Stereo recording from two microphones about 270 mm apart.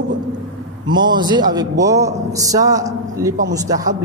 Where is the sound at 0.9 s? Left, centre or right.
Centre.